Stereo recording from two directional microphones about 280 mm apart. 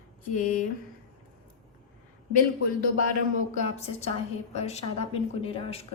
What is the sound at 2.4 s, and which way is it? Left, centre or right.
A man's voice, left.